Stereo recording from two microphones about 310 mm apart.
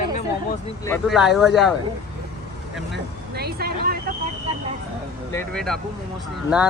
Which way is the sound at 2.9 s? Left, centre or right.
Right.